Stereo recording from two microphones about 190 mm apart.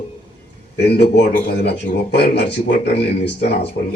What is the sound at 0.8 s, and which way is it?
A man's voice, 60° left (ahead or behind).